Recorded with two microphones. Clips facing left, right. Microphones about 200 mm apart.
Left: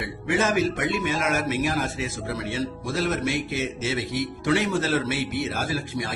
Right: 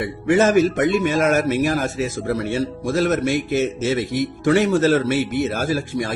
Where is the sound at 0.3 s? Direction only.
45° right (ahead or behind).